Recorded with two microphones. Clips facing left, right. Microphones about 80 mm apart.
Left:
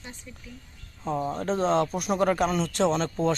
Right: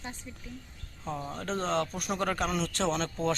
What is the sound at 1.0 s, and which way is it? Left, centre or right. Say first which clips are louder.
Speech: left 8 dB; left.